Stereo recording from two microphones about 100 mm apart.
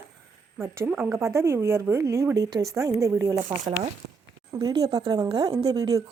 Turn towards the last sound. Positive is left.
turn(degrees=-40)  # may be behind; listen again after turning